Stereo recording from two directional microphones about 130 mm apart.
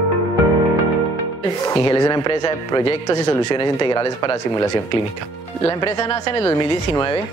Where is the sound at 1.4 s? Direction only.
30° left (ahead or behind).